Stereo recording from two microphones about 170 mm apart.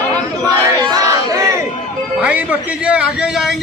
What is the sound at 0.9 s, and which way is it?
Crowd, 20° right (ahead or behind).